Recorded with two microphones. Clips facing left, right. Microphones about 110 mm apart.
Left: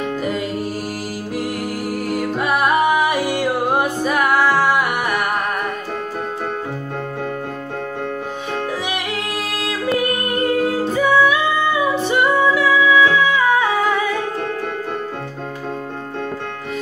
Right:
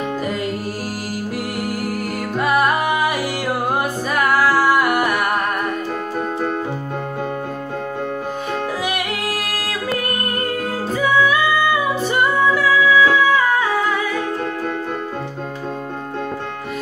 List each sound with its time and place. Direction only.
1.9 s music: centre (ahead or behind)
8.9 s music: 5° right (ahead or behind)